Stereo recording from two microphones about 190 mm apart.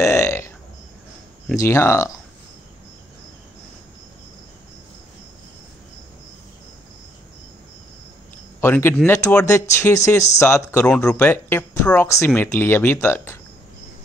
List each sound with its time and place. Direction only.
0.0 s a sound: 15° left (ahead or behind)
1.6 s speech: 15° left (ahead or behind)
8.5 s speech: 10° left (ahead or behind)